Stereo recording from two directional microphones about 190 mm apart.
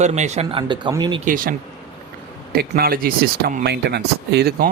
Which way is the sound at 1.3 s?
45° right (ahead or behind).